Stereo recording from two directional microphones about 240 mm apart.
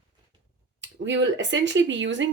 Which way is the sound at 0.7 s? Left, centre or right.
Right.